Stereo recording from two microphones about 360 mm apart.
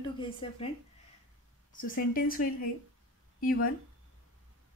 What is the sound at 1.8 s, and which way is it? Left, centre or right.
Speech, left.